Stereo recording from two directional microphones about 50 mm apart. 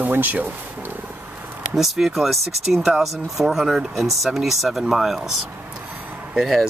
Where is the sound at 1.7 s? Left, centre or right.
Centre.